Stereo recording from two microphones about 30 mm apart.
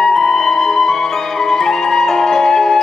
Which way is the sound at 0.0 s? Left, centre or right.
Centre.